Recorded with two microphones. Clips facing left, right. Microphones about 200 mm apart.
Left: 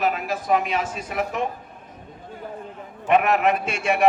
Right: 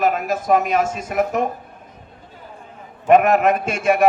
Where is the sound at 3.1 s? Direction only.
45° right (ahead or behind).